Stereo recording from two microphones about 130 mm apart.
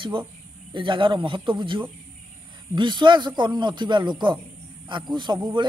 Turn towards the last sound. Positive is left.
turn(degrees=-35)  # may be behind; listen again after turning